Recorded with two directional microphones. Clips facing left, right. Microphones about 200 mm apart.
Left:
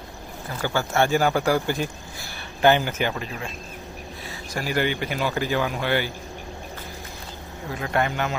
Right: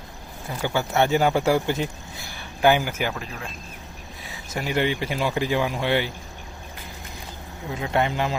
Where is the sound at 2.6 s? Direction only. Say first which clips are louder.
Left 1 dB; 10° right (ahead or behind).